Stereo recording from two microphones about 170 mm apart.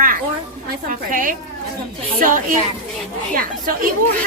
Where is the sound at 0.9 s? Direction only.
50° right (ahead or behind).